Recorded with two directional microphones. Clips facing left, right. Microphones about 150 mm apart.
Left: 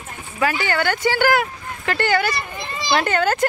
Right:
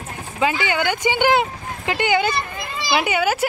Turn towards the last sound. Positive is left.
turn(degrees=-10)  # may be behind; listen again after turning